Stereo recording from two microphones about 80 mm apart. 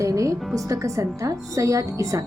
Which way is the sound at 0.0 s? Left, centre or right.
Right.